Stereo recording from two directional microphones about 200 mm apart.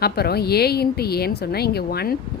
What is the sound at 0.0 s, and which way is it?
A woman's voice, 50° left (ahead or behind).